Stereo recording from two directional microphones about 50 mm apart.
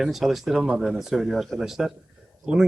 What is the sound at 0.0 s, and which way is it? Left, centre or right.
Speech, centre.